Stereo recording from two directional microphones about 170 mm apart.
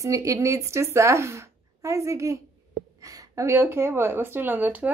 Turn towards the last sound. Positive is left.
turn(degrees=-10)  # may be behind; listen again after turning